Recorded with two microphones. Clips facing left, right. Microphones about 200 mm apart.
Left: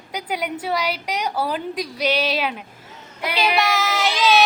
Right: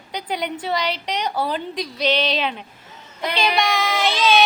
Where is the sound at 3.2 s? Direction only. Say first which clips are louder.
Even; 5° left (ahead or behind).